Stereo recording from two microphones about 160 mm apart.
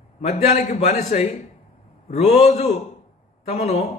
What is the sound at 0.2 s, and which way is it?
A man's voice, 45° left (ahead or behind).